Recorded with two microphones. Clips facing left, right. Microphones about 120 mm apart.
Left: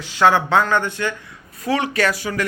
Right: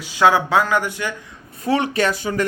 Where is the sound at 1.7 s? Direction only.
30° right (ahead or behind).